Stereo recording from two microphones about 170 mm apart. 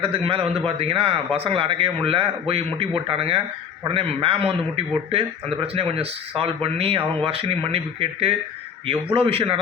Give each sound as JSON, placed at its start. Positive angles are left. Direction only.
{"t": 0.0, "sound": "speech", "side_deg": -30}